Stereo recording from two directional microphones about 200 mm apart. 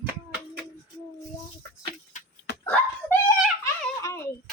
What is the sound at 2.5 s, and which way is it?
Dog, 55° left (ahead or behind).